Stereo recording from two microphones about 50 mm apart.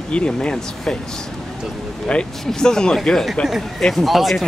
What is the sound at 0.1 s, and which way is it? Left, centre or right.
Speech, left.